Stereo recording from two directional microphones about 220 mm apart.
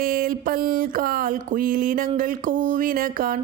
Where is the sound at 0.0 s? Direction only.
40° right (ahead or behind).